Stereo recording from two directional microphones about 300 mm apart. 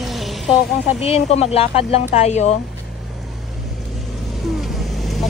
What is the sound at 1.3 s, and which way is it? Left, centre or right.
Speech, centre.